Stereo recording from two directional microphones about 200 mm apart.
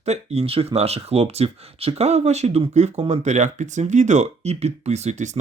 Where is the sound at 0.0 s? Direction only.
30° right (ahead or behind).